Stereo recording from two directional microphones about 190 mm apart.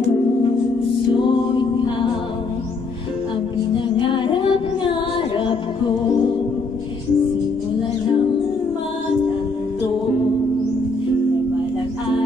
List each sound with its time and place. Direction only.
4.0 s music: 25° left (ahead or behind)